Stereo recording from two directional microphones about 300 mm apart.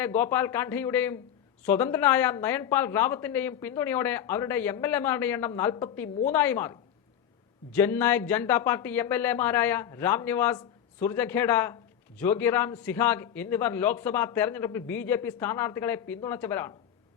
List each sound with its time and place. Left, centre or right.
0.0 s speech: centre